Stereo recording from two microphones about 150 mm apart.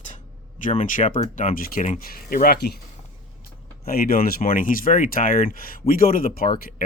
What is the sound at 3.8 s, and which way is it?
Speech, 80° left.